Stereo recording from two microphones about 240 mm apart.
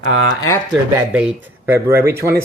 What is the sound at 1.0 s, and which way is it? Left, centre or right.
Speech, centre.